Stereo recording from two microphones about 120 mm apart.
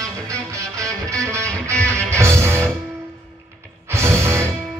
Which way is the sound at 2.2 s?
20° right (ahead or behind).